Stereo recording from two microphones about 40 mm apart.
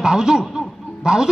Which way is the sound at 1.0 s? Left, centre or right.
Centre.